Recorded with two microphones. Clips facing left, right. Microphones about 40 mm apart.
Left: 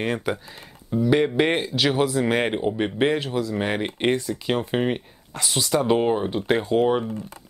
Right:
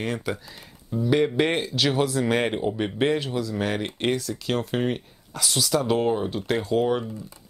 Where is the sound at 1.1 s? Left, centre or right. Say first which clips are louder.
Left 1 dB; centre.